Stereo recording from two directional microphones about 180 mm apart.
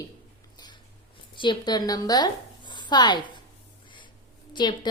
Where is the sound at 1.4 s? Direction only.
25° left (ahead or behind).